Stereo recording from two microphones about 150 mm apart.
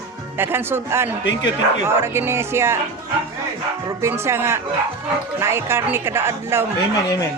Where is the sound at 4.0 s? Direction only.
15° right (ahead or behind).